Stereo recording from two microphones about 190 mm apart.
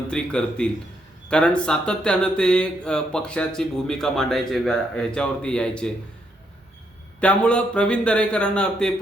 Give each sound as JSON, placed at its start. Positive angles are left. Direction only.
{"t": 0.1, "sound": "speech", "side_deg": 5}
{"t": 7.2, "sound": "speech", "side_deg": 5}